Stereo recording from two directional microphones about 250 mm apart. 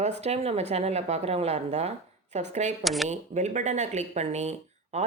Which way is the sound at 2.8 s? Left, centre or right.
Centre.